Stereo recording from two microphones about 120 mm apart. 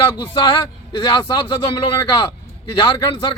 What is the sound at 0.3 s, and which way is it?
Speech, 40° left (ahead or behind).